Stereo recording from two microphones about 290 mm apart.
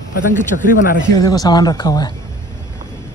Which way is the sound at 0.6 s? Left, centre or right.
Left.